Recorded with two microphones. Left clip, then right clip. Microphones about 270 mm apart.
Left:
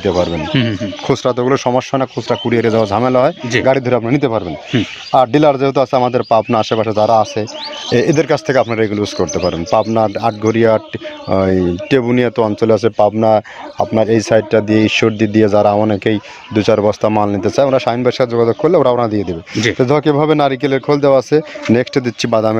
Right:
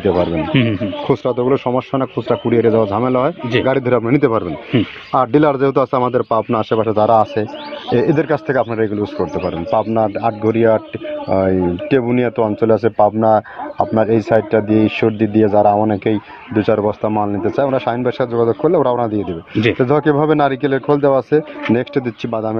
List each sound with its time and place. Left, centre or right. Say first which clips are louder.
0.0 s speech: left 1 dB; left